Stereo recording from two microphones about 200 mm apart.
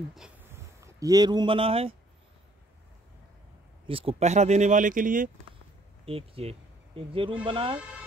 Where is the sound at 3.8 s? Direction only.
25° right (ahead or behind).